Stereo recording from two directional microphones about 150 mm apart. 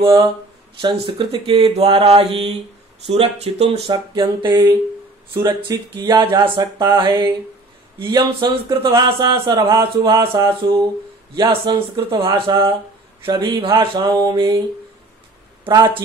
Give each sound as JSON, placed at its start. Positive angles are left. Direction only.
{"t": 0.0, "sound": "speech", "side_deg": -25}
{"t": 3.9, "sound": "speech", "side_deg": -30}
{"t": 11.3, "sound": "speech", "side_deg": -30}
{"t": 15.6, "sound": "speech", "side_deg": -35}